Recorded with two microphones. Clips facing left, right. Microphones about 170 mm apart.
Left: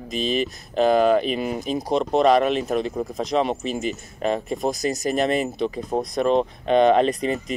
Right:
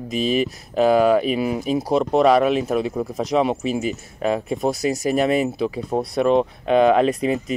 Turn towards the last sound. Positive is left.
turn(degrees=-5)  # may be behind; listen again after turning